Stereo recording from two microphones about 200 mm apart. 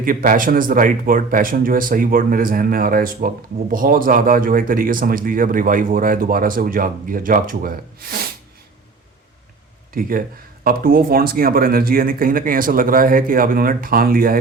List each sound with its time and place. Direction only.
0.0 s speech: 45° right (ahead or behind)
9.9 s speech: 45° right (ahead or behind)